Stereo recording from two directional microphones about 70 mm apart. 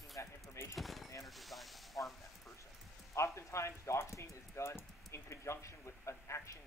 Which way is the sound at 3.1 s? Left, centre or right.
Left.